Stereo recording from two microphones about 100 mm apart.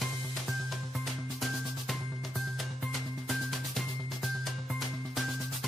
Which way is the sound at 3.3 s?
Centre (ahead or behind).